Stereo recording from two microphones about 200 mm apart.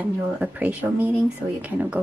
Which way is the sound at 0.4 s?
5° right (ahead or behind).